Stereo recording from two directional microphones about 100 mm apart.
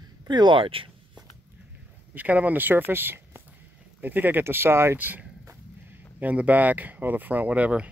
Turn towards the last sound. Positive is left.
turn(degrees=-15)  # may be behind; listen again after turning